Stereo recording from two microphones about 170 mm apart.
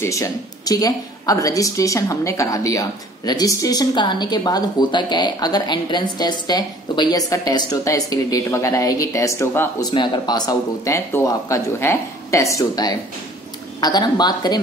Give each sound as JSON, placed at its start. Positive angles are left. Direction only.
{"t": 0.0, "sound": "a woman's voice", "side_deg": 20}
{"t": 9.8, "sound": "a woman's voice", "side_deg": 25}